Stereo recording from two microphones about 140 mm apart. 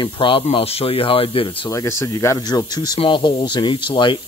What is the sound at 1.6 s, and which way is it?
Speech, 20° left (ahead or behind).